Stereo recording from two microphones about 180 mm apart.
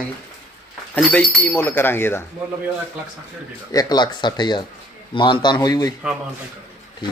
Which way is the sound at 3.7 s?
20° left (ahead or behind).